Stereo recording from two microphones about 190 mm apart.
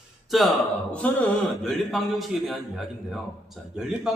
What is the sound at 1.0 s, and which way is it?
Mantra, 5° left (ahead or behind).